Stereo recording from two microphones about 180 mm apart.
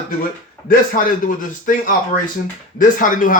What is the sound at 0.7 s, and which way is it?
Speech, 50° left (ahead or behind).